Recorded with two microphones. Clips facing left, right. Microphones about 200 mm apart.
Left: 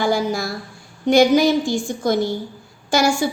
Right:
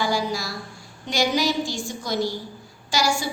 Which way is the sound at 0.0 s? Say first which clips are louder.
Left 5 dB; 55° left (ahead or behind).